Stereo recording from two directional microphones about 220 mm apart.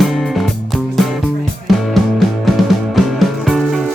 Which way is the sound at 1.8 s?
Centre (ahead or behind).